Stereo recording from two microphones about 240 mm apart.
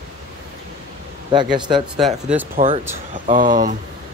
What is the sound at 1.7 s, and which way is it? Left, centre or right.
Speech, centre.